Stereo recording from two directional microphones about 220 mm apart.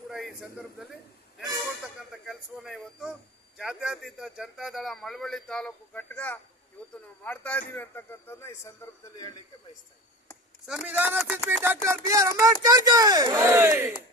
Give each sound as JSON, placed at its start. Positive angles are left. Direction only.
{"t": 0.1, "sound": "a sound", "side_deg": 0}
{"t": 1.8, "sound": "a man's voice", "side_deg": 0}
{"t": 10.7, "sound": "speech", "side_deg": -5}